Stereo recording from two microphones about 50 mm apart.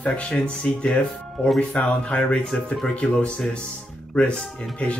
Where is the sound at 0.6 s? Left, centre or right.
Centre.